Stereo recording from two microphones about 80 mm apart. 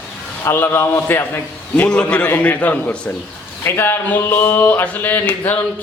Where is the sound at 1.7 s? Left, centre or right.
Centre.